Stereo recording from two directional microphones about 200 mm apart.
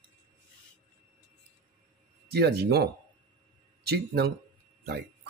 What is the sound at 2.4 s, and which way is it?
Speech, 55° right (ahead or behind).